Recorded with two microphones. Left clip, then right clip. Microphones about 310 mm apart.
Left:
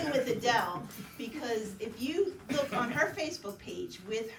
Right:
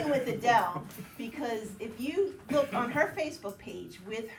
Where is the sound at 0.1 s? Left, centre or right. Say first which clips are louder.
Right 3 dB; right.